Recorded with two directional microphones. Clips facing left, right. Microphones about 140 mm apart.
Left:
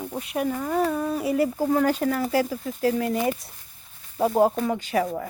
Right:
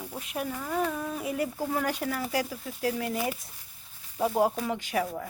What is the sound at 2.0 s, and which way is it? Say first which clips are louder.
Speech: left 7 dB; 5° right (ahead or behind).